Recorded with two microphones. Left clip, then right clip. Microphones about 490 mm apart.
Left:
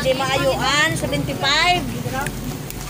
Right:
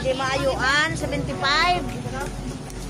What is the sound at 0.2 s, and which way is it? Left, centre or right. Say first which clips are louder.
Speech: left 3 dB; right.